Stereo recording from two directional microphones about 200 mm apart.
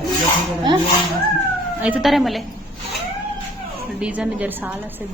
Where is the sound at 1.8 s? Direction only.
5° right (ahead or behind).